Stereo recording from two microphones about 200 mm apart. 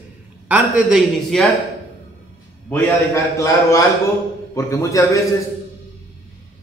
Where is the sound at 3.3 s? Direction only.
15° left (ahead or behind).